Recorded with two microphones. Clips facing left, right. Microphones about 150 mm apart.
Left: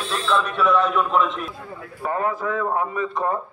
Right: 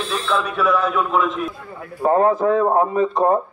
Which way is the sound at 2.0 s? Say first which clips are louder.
Right 9 dB; 35° right (ahead or behind).